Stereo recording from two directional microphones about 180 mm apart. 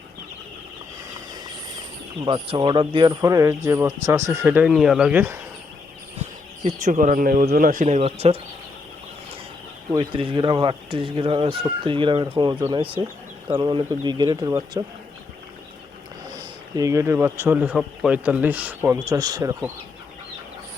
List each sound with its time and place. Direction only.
2.2 s speech: 30° right (ahead or behind); by 5.4 s 10° right (ahead or behind)
6.7 s speech: 45° right (ahead or behind)
9.9 s speech: 25° right (ahead or behind)
16.3 s speech: 20° right (ahead or behind)
18.9 s speech: 20° right (ahead or behind)